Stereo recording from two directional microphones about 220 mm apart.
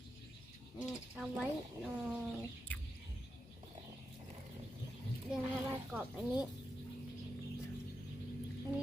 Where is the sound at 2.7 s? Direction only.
10° left (ahead or behind).